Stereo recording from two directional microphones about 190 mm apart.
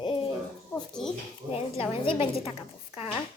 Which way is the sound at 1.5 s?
30° left (ahead or behind).